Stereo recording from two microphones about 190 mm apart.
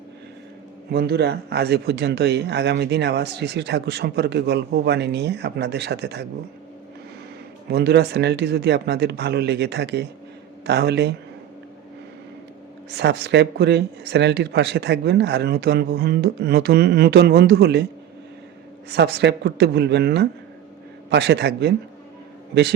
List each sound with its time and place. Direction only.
0.9 s speech: 55° right (ahead or behind)
7.7 s speech: 60° right (ahead or behind)
12.9 s speech: 60° right (ahead or behind)
18.9 s speech: 60° right (ahead or behind)